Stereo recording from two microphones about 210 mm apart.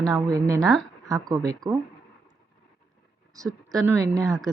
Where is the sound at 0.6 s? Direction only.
Centre (ahead or behind).